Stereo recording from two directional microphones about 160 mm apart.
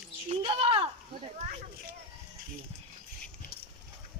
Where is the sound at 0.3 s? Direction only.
35° right (ahead or behind).